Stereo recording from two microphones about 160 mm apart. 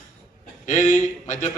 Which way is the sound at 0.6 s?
50° left (ahead or behind).